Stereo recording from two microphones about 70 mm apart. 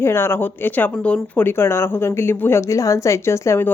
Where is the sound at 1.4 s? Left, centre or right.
Left.